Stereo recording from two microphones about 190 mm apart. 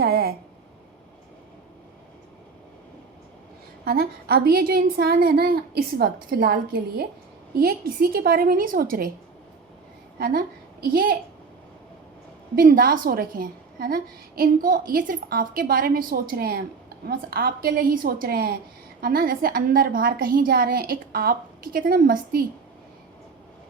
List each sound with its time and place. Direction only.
0.0 s speech: 55° right (ahead or behind)
3.8 s a woman's voice: 55° right (ahead or behind)
10.2 s a woman's voice: 55° right (ahead or behind)
12.5 s a woman's voice: 50° right (ahead or behind)